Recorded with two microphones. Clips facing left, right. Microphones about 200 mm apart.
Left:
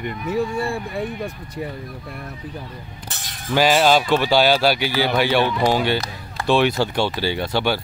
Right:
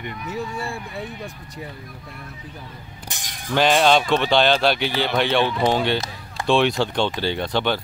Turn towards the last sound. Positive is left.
turn(degrees=5)  # may be behind; listen again after turning